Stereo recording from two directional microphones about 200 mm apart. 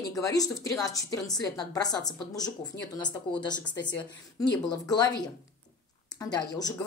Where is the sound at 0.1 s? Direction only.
15° left (ahead or behind).